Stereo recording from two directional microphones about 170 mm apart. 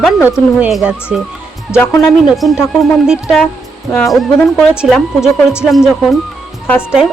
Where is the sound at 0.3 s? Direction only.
5° right (ahead or behind).